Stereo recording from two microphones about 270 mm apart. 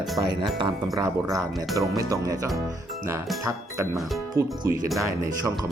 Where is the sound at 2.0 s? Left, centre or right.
Centre.